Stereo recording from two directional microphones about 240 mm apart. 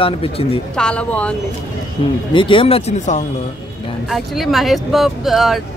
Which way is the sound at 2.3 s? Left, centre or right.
Left.